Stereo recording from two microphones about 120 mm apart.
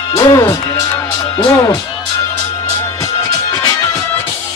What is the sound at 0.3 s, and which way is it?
Speech, 30° left (ahead or behind).